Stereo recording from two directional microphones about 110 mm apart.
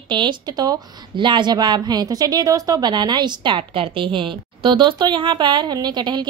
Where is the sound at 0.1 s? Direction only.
45° right (ahead or behind).